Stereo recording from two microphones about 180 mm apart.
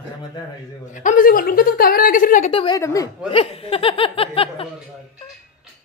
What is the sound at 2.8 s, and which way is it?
Speech, 20° left (ahead or behind).